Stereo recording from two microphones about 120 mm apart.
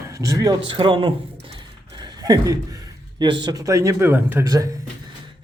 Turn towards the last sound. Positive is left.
turn(degrees=-20)  # may be behind; listen again after turning